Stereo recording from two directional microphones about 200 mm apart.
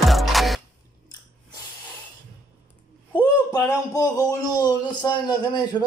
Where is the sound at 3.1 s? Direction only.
20° left (ahead or behind).